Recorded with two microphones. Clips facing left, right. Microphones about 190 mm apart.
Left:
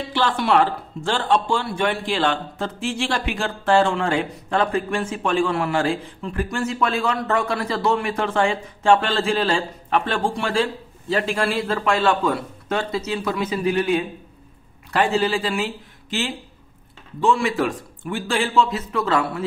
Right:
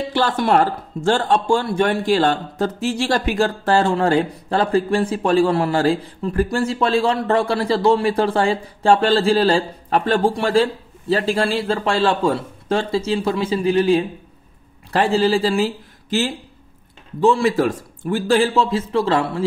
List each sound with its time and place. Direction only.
0.1 s speech: 40° right (ahead or behind)